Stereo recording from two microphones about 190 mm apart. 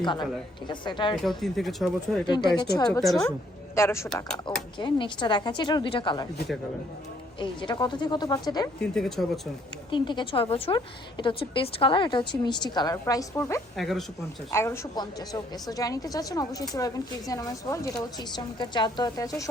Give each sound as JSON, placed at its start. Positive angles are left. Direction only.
{"t": 0.0, "sound": "a woman's voice", "side_deg": 25}
{"t": 1.2, "sound": "speech", "side_deg": 0}
{"t": 2.2, "sound": "a woman's voice", "side_deg": 25}
{"t": 4.5, "sound": "a woman's voice", "side_deg": 25}
{"t": 7.3, "sound": "a woman's voice", "side_deg": 25}
{"t": 8.8, "sound": "speech", "side_deg": 5}
{"t": 9.9, "sound": "a woman's voice", "side_deg": 25}
{"t": 13.7, "sound": "speech", "side_deg": 0}
{"t": 14.5, "sound": "a woman's voice", "side_deg": 15}